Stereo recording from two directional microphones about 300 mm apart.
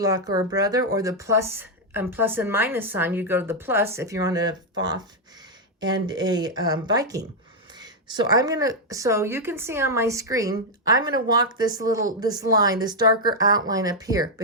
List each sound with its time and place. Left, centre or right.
0.0 s speech: centre